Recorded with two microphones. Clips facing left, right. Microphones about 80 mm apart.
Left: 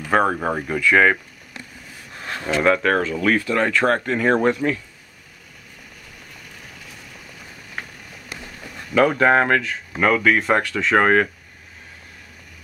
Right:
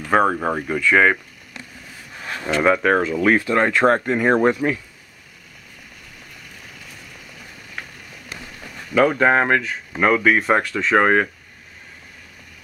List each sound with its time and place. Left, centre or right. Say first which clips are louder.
0.1 s speech: right 1 dB; centre
2.6 s speech: right 1 dB; centre
3.2 s speech: right 2 dB; right
8.9 s speech: even; centre